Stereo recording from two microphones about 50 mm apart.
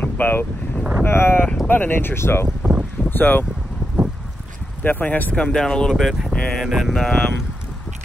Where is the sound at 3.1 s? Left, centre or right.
Left.